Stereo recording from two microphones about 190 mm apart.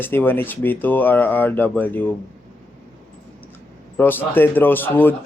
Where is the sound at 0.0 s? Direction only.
10° left (ahead or behind).